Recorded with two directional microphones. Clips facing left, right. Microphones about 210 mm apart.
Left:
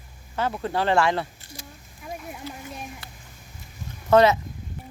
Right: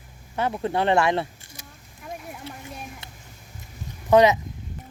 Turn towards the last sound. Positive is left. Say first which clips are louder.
# right 1 dB
turn(degrees=-15)  # may be behind; listen again after turning